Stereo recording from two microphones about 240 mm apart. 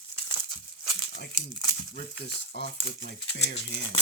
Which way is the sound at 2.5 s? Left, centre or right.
Left.